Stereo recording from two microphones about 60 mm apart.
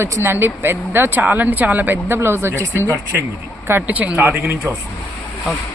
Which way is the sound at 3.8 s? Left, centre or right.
Right.